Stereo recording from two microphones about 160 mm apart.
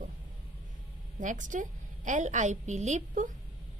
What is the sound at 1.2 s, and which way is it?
A woman's voice, 55° right (ahead or behind).